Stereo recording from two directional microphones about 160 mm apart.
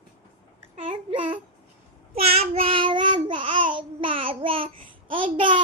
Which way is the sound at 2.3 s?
40° right (ahead or behind).